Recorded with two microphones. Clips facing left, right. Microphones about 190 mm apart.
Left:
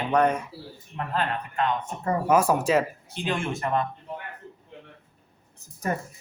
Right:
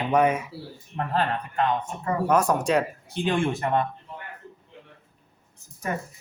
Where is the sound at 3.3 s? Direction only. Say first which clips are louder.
Right 3 dB; 25° right (ahead or behind).